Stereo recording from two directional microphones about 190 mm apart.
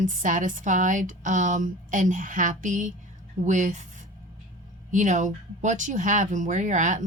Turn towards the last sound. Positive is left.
turn(degrees=-40)  # may be behind; listen again after turning